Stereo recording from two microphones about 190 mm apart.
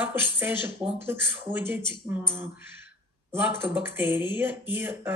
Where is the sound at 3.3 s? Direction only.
10° right (ahead or behind).